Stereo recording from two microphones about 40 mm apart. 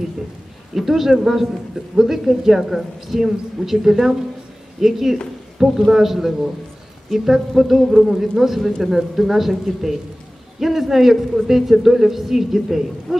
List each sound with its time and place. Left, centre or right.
0.7 s a woman's voice: centre